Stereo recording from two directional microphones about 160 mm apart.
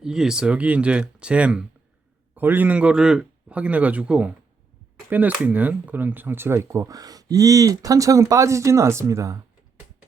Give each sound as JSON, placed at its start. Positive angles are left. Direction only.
{"t": 0.0, "sound": "speech", "side_deg": -5}